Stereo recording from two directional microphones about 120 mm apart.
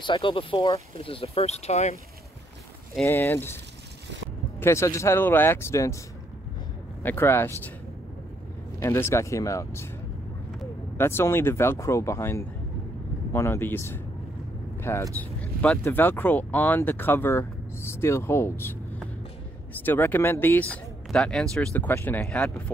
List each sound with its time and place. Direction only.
0.0 s speech: 45° left (ahead or behind); by 2.0 s 65° left (ahead or behind)
3.1 s speech: 20° left (ahead or behind)
4.6 s speech: 25° left (ahead or behind)
7.0 s speech: 20° left (ahead or behind)
8.7 s speech: 25° left (ahead or behind)
11.0 s speech: 20° left (ahead or behind)
15.1 s a sound: 10° left (ahead or behind)
15.8 s speech: 15° left (ahead or behind)